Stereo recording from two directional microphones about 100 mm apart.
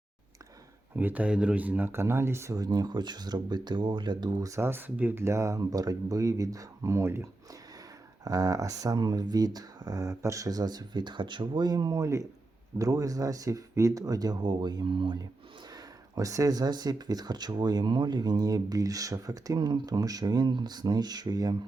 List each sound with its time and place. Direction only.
0.9 s speech: 15° right (ahead or behind)
2.6 s speech: 45° right (ahead or behind); by 7.3 s 25° right (ahead or behind)
8.2 s speech: 40° right (ahead or behind)
15.7 s speech: 35° right (ahead or behind)
19.5 s speech: 45° right (ahead or behind)